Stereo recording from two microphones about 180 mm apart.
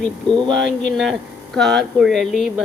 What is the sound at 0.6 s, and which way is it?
Speech, centre (ahead or behind).